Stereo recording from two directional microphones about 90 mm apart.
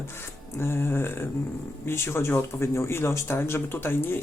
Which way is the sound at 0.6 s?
25° left (ahead or behind).